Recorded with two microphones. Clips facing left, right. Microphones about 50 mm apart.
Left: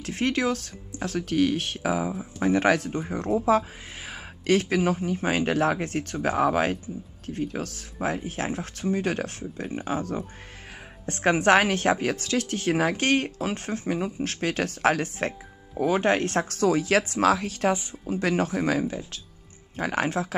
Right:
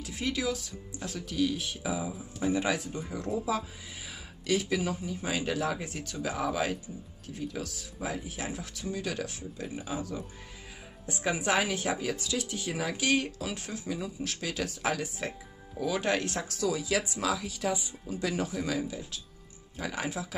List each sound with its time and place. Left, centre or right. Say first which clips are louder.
0.0 s speech: left 7 dB; left
15.8 s speech: left 7 dB; left